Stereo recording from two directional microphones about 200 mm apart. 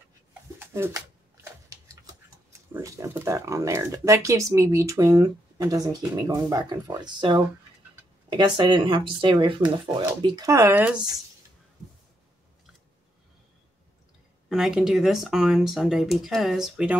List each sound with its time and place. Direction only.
0.6 s pigeon: 10° right (ahead or behind)
2.7 s speech: 15° right (ahead or behind)
14.5 s speech: centre (ahead or behind)